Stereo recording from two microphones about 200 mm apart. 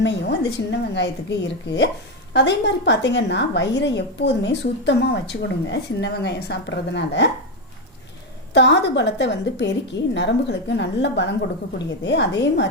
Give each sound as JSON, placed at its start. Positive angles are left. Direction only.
{"t": 0.0, "sound": "a woman's voice", "side_deg": 60}
{"t": 8.5, "sound": "a woman's voice", "side_deg": 60}